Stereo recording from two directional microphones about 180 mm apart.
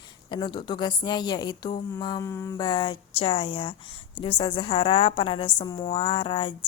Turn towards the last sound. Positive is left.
turn(degrees=25)  # may be behind; listen again after turning